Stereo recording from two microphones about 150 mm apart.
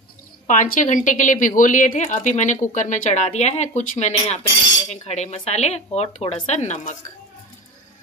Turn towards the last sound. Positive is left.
turn(degrees=50)  # may be behind; listen again after turning